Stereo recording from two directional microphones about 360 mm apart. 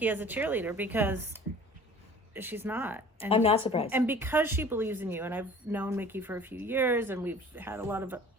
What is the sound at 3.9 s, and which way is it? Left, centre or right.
Speech, centre.